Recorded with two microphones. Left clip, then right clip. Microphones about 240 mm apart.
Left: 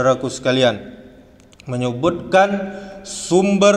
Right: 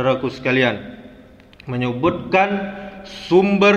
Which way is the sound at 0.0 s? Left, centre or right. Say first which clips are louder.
Left 2 dB; left.